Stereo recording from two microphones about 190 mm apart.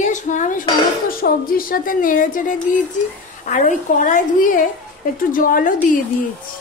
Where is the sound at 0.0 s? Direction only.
40° left (ahead or behind).